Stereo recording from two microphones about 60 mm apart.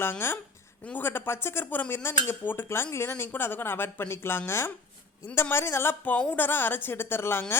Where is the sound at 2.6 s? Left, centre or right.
Left.